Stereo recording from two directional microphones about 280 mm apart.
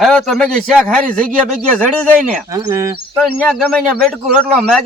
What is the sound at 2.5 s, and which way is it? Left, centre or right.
Speech, centre.